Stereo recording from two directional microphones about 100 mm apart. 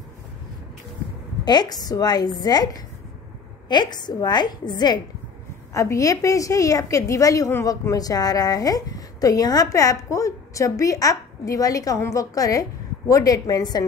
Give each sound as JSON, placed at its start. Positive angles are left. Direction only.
{"t": 1.4, "sound": "a woman's voice", "side_deg": 45}
{"t": 5.7, "sound": "speech", "side_deg": 30}